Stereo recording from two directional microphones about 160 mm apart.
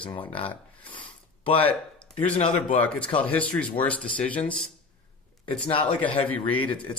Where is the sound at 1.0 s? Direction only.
35° left (ahead or behind).